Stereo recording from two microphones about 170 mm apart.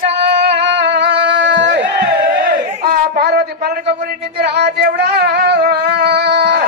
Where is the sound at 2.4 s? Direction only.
60° right (ahead or behind).